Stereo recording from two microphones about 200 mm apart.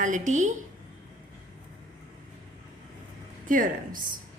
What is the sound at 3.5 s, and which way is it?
Speech, 45° right (ahead or behind).